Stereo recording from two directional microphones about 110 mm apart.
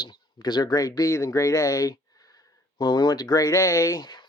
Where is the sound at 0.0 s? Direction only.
40° left (ahead or behind).